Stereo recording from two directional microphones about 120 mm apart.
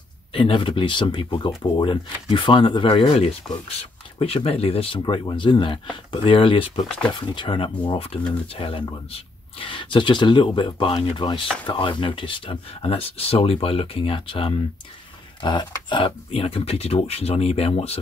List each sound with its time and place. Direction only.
0.3 s speech: 45° left (ahead or behind)
16.3 s speech: 55° left (ahead or behind)